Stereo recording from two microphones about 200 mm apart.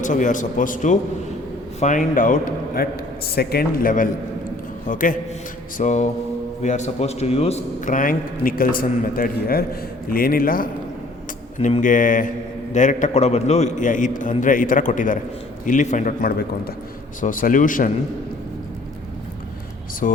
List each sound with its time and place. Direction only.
0.0 s a man's voice: 40° left (ahead or behind)
20.0 s speech: 40° left (ahead or behind)